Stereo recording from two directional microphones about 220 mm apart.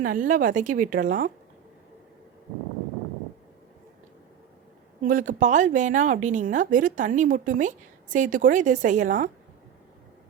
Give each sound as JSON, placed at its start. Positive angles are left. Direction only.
{"t": 0.0, "sound": "a woman's voice", "side_deg": -35}
{"t": 5.0, "sound": "a woman's voice", "side_deg": -35}